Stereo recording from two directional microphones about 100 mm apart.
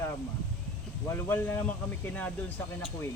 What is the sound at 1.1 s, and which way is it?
Speech, 20° left (ahead or behind).